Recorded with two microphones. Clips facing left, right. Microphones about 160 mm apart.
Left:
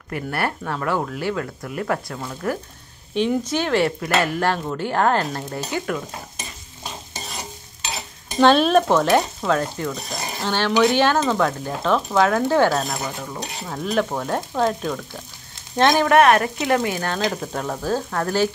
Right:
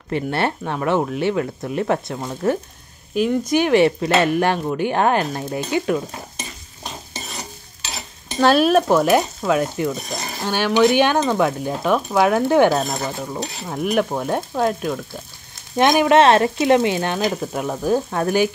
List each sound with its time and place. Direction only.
0.1 s speech: 25° right (ahead or behind)
3.2 s speech: 10° right (ahead or behind)
8.4 s speech: 5° right (ahead or behind)
17.2 s speech: 10° right (ahead or behind)